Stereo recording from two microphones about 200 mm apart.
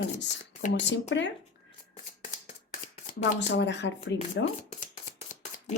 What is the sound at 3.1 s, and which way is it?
Speech, 40° left (ahead or behind).